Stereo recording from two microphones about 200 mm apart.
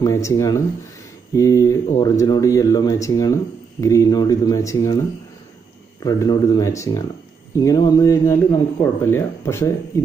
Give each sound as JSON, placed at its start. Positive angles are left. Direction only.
{"t": 0.0, "sound": "speech", "side_deg": 15}
{"t": 6.0, "sound": "speech", "side_deg": 20}